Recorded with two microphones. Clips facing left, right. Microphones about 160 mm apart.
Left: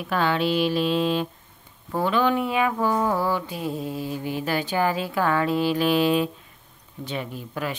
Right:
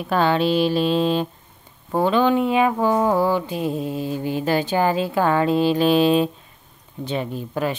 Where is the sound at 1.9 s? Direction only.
25° right (ahead or behind).